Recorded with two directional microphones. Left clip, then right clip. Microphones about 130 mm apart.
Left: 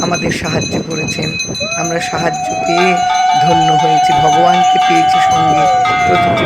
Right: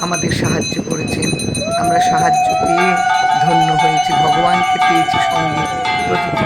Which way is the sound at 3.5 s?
Centre (ahead or behind).